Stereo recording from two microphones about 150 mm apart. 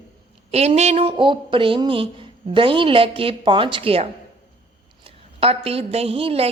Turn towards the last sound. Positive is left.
turn(degrees=-40)  # may be behind; listen again after turning